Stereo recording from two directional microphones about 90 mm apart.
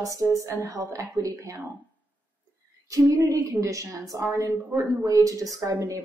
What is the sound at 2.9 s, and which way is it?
A woman's voice, 40° right (ahead or behind).